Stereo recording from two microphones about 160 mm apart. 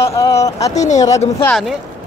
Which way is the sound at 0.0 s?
20° left (ahead or behind).